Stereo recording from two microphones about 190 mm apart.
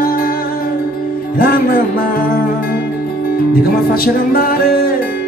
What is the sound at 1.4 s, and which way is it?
Music, 50° left (ahead or behind).